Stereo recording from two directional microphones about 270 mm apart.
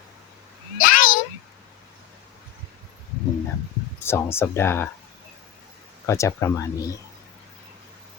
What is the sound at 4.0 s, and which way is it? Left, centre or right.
Speech, centre.